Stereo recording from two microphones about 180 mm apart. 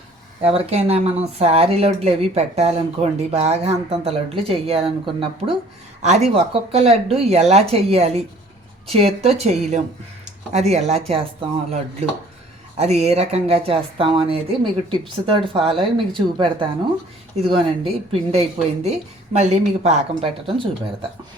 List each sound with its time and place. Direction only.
0.4 s speech: 35° right (ahead or behind)
6.0 s speech: 40° right (ahead or behind)